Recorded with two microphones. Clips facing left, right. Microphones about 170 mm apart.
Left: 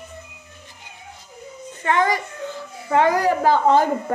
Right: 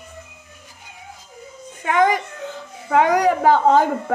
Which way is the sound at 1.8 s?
15° right (ahead or behind).